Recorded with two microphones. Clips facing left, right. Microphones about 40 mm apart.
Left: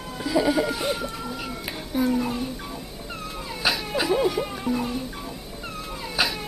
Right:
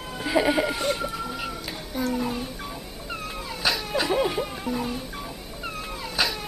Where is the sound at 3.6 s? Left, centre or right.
Centre.